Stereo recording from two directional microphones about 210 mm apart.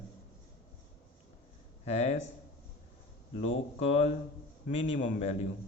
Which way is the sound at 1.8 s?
30° left (ahead or behind).